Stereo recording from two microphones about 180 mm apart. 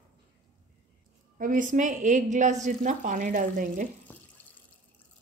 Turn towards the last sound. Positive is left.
turn(degrees=10)  # may be behind; listen again after turning